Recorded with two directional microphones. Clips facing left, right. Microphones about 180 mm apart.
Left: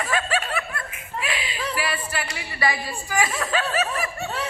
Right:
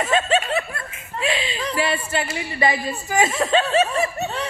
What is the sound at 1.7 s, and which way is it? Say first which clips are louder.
A woman's voice: right 6 dB; 25° right (ahead or behind).